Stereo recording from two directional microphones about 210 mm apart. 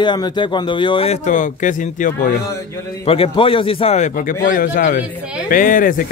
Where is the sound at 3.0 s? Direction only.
25° left (ahead or behind).